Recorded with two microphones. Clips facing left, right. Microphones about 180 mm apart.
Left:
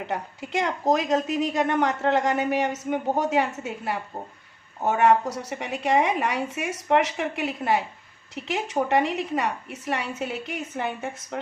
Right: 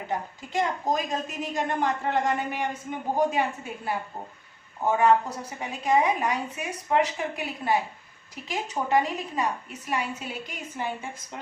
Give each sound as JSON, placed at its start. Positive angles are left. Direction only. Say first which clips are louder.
{"t": 0.1, "sound": "a woman's voice", "louder": "even", "side_deg": 70}